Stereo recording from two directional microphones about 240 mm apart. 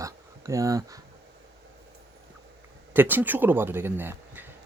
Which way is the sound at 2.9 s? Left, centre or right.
Centre.